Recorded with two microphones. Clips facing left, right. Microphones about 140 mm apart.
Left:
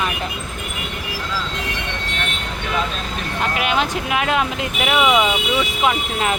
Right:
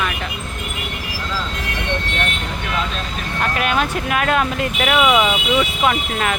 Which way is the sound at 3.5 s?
15° left (ahead or behind).